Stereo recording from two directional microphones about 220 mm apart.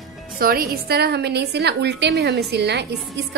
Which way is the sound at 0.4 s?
45° right (ahead or behind).